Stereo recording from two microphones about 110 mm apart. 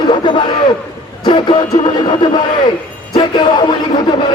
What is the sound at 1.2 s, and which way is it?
A man's voice, 45° left (ahead or behind).